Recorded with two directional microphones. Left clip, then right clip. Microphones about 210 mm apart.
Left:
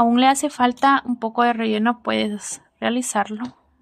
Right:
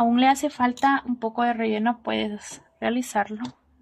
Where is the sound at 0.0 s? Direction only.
25° left (ahead or behind).